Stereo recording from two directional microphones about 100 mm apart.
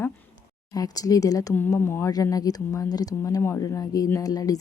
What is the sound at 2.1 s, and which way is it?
A woman's voice, 35° left (ahead or behind).